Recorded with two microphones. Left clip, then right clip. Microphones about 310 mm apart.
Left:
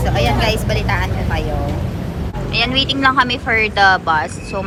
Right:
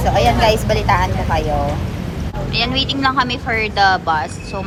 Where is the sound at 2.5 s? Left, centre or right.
Centre.